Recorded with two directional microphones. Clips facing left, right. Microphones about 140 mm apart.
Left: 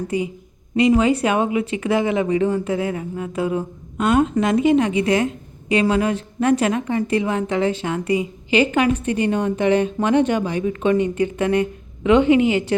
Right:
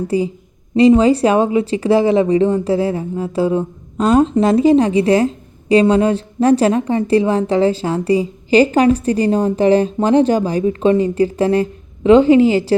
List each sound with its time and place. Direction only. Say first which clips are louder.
0.1 s speech: right 7 dB; 30° right (ahead or behind)